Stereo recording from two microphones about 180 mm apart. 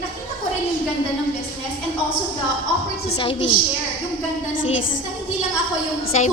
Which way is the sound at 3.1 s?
30° left (ahead or behind).